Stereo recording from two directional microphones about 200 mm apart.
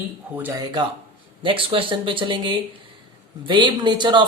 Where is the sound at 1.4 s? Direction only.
25° right (ahead or behind).